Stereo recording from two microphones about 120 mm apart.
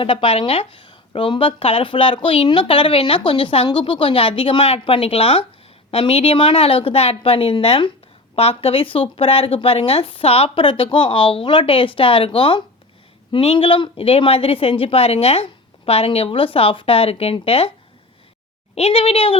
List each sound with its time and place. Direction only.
0.0 s a woman's voice: 45° left (ahead or behind)
18.7 s speech: 55° left (ahead or behind)